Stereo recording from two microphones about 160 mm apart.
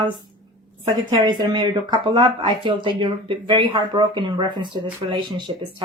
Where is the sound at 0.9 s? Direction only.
25° right (ahead or behind).